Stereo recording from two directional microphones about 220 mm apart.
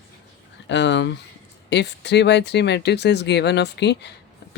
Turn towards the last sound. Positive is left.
turn(degrees=50)  # may be behind; listen again after turning